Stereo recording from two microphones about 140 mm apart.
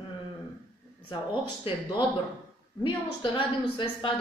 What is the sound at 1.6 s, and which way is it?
A woman's voice, 35° left (ahead or behind).